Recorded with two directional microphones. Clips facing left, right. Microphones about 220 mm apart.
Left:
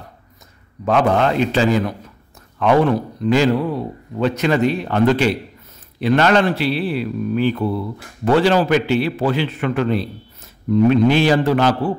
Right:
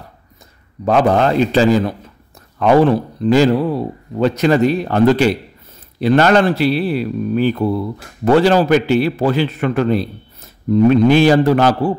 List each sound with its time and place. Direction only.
0.8 s a man's voice: 35° right (ahead or behind)